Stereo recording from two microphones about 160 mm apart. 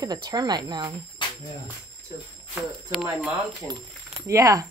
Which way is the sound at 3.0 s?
10° right (ahead or behind).